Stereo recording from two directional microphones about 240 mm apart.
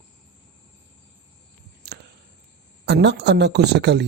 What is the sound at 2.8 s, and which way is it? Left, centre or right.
Speech, right.